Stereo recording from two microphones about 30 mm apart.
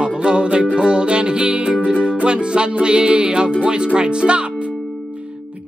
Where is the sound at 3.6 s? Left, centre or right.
Right.